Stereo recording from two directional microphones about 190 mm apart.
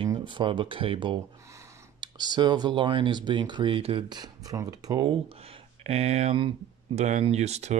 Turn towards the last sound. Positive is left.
turn(degrees=-35)  # may be behind; listen again after turning